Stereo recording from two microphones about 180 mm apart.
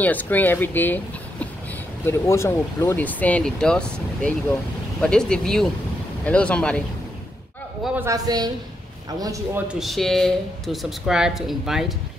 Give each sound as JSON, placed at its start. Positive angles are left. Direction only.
{"t": 0.0, "sound": "speech", "side_deg": 10}
{"t": 7.8, "sound": "a woman's voice", "side_deg": -10}
{"t": 9.7, "sound": "speech", "side_deg": 0}